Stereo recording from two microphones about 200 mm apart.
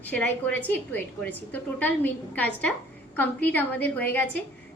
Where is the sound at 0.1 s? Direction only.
10° left (ahead or behind).